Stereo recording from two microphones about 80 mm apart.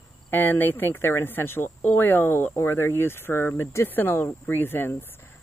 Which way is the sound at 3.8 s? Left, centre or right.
Left.